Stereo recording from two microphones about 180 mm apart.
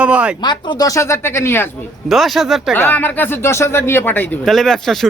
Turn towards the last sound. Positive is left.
turn(degrees=0)  # may be behind; listen again after turning